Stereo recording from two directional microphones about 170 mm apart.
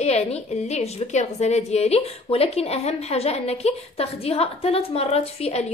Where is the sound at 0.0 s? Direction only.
40° left (ahead or behind).